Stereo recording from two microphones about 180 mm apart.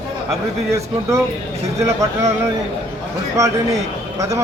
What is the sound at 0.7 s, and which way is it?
A man's voice, 15° right (ahead or behind).